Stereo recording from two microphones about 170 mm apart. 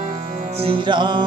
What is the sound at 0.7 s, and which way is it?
Music, 30° right (ahead or behind).